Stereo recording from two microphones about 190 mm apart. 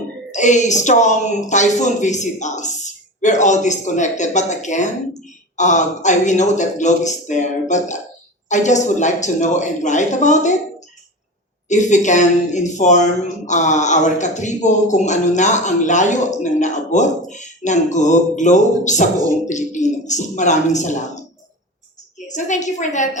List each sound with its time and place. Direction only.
0.3 s a woman's voice: 40° left (ahead or behind)
11.7 s a woman's voice: 40° left (ahead or behind)
22.3 s a woman's voice: 40° left (ahead or behind)